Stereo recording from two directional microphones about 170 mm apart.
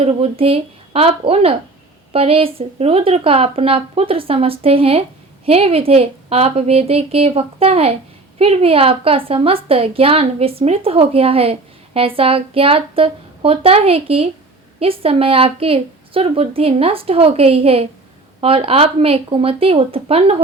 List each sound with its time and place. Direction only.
0.0 s a woman's voice: 35° right (ahead or behind)